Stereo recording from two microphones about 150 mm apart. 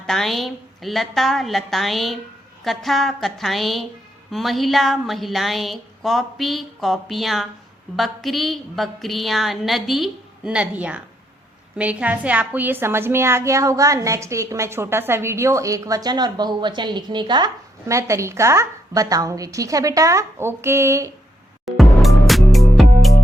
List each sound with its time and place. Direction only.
0.0 s a woman's voice: centre (ahead or behind); by 21.1 s 20° right (ahead or behind)
21.8 s music: centre (ahead or behind)